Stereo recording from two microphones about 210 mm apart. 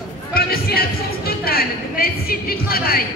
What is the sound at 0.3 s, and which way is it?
A woman's voice, 45° left (ahead or behind).